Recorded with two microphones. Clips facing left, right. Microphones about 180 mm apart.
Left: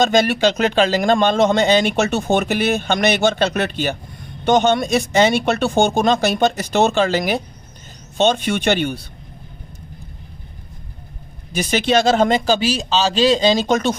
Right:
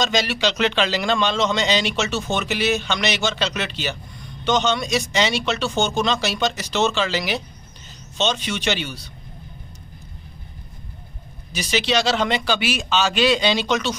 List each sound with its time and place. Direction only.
0.0 s a man's voice: 50° left (ahead or behind)
11.5 s a man's voice: 50° left (ahead or behind)